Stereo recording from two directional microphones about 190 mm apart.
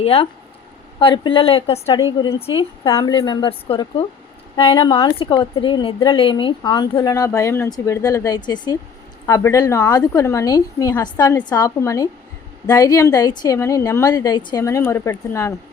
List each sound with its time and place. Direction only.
0.0 s a woman's voice: 30° left (ahead or behind); by 15.5 s 15° left (ahead or behind)